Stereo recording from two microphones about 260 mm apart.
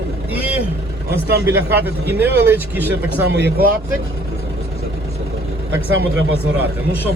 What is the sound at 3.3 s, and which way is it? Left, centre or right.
Speech, right.